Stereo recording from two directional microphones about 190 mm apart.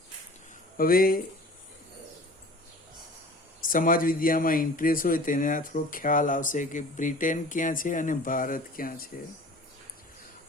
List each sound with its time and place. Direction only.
0.8 s speech: 50° left (ahead or behind)
3.6 s speech: 45° left (ahead or behind)